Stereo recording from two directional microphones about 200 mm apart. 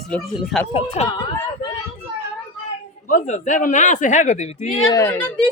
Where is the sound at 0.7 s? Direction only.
30° left (ahead or behind).